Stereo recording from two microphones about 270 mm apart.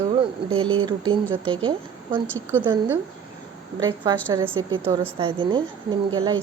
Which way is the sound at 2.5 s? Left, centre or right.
Centre.